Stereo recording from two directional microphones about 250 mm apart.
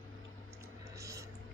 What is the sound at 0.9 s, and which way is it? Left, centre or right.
Music, centre.